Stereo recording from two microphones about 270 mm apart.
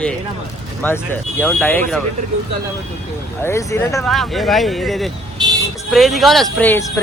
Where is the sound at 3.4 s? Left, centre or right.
Centre.